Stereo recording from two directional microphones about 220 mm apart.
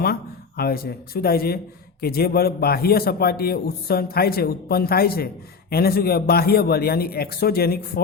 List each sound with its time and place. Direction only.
0.0 s a man's voice: 45° left (ahead or behind)